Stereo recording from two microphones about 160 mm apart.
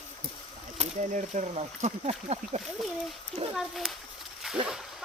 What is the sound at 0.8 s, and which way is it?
Speech, 50° right (ahead or behind).